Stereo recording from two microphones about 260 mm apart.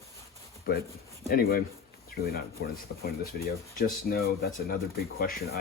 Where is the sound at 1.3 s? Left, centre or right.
Left.